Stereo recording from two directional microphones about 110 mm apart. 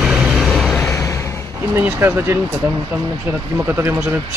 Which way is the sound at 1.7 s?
20° right (ahead or behind).